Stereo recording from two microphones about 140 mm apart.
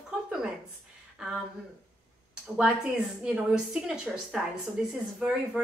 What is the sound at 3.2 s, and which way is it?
A woman's voice, 5° right (ahead or behind).